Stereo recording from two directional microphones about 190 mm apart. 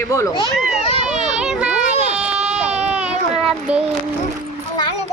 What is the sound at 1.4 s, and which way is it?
Children playing, 5° right (ahead or behind).